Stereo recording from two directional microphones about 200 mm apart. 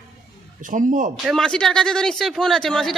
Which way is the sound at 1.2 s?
Centre (ahead or behind).